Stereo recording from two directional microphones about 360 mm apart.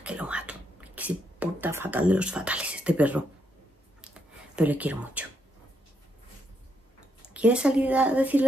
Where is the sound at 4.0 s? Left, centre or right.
Centre.